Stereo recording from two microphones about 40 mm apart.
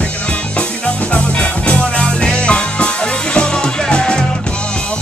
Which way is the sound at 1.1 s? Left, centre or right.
Left.